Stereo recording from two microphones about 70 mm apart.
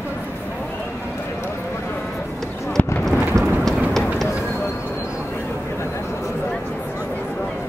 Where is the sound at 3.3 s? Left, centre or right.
Right.